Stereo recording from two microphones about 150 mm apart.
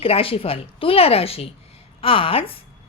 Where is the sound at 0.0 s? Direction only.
40° left (ahead or behind).